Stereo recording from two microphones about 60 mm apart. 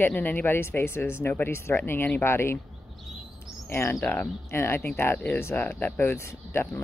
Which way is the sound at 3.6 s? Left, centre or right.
Left.